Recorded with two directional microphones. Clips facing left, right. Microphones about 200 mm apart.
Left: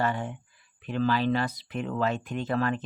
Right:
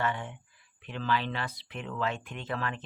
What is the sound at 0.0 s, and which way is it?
Speech, 40° left (ahead or behind).